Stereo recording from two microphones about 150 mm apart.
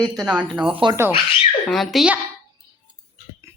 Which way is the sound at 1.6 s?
Centre (ahead or behind).